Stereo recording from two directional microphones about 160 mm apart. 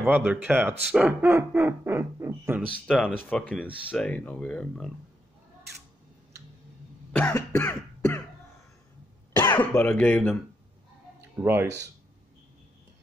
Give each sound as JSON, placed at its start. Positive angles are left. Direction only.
{"t": 0.0, "sound": "speech", "side_deg": -10}
{"t": 2.9, "sound": "speech", "side_deg": 5}
{"t": 7.1, "sound": "cough", "side_deg": 10}
{"t": 9.4, "sound": "speech", "side_deg": 15}
{"t": 11.4, "sound": "speech", "side_deg": -10}